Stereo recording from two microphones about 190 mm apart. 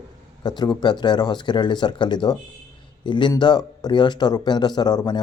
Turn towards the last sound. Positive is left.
turn(degrees=20)  # may be behind; listen again after turning